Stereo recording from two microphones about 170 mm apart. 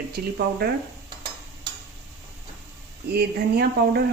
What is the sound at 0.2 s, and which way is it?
Speech, 60° right (ahead or behind).